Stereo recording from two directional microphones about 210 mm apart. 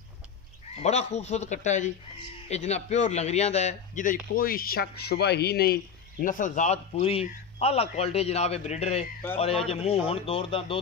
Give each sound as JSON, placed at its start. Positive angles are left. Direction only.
{"t": 0.8, "sound": "a man's voice", "side_deg": 30}